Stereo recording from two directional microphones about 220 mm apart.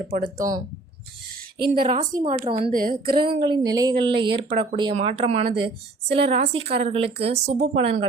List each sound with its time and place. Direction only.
0.1 s speech: 20° right (ahead or behind)
1.5 s speech: 45° right (ahead or behind)
2.3 s speech: 20° right (ahead or behind)
2.7 s a woman's voice: 40° right (ahead or behind)
3.2 s speech: 20° right (ahead or behind)
6.6 s speech: 50° right (ahead or behind)
6.8 s speech: 25° right (ahead or behind)